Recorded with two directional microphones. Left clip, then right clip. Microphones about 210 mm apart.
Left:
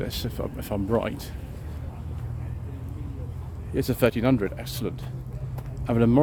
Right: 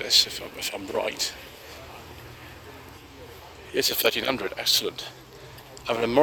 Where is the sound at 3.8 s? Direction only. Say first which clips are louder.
Right 1 dB; 10° left (ahead or behind).